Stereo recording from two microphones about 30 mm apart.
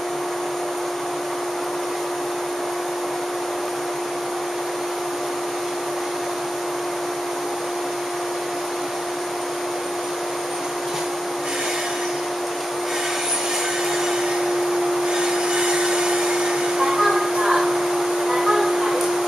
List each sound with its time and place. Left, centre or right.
15.0 s vacuum cleaner: right
18.3 s music: centre